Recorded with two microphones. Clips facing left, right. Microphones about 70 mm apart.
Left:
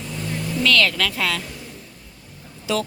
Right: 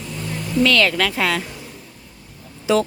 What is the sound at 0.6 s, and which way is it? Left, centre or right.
Speech, right.